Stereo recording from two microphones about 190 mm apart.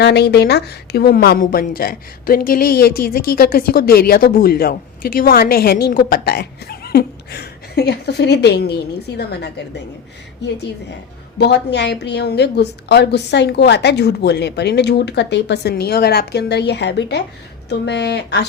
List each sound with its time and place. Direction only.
0.0 s a woman's voice: 60° left (ahead or behind)
11.3 s a woman's voice: 60° left (ahead or behind)